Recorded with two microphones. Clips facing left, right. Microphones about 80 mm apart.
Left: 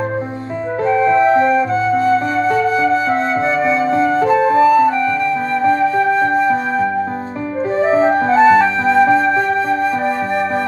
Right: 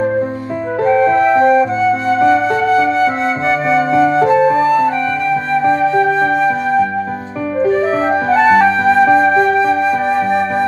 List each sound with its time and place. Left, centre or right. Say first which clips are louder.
0.9 s music: right 1 dB; centre
2.2 s flute: right 3 dB; right
7.6 s music: left 1 dB; left